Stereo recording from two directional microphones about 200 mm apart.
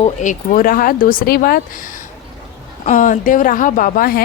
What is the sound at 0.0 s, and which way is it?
A woman's voice, 40° left (ahead or behind).